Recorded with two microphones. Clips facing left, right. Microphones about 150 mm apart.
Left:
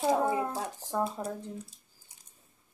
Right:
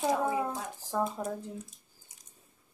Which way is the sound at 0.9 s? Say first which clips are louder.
Even; 5° left (ahead or behind).